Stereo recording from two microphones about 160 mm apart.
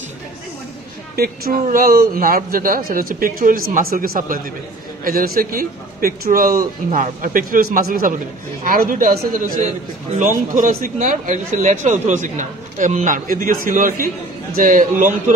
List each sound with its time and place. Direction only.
1.1 s a man's voice: 70° right (ahead or behind)